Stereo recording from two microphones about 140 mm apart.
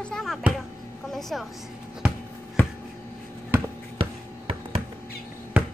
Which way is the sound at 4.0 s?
40° right (ahead or behind).